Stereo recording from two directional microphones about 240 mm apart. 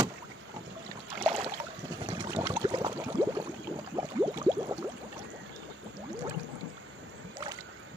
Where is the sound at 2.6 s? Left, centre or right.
Centre.